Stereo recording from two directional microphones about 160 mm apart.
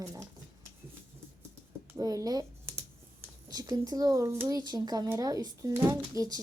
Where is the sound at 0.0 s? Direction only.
20° right (ahead or behind).